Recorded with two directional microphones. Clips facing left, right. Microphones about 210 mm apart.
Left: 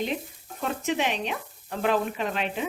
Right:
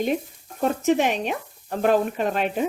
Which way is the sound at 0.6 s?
45° right (ahead or behind).